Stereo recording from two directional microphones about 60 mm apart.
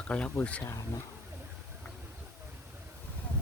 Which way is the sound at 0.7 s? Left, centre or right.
Left.